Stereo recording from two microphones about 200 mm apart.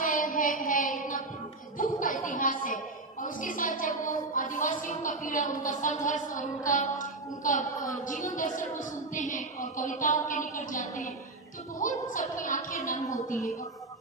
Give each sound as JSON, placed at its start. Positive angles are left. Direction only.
{"t": 0.0, "sound": "a sound", "side_deg": 40}
{"t": 3.2, "sound": "a woman's voice", "side_deg": 40}
{"t": 12.7, "sound": "a woman's voice", "side_deg": 15}